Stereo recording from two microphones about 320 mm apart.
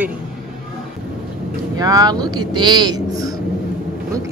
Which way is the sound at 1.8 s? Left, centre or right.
Centre.